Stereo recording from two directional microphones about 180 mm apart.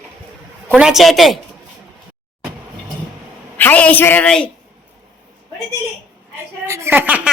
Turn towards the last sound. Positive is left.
turn(degrees=-10)  # may be behind; listen again after turning